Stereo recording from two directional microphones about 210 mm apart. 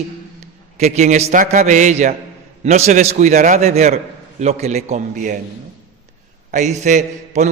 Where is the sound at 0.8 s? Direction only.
30° right (ahead or behind).